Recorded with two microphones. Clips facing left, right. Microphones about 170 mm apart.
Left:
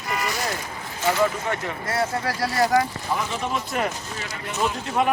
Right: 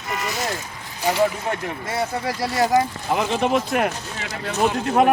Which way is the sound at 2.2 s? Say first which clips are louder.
Right 1 dB; 20° right (ahead or behind).